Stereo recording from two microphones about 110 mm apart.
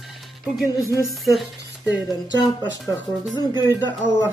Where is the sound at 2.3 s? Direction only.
40° left (ahead or behind).